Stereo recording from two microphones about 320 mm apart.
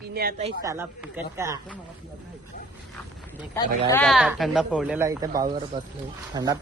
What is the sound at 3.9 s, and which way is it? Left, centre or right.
Speech, centre.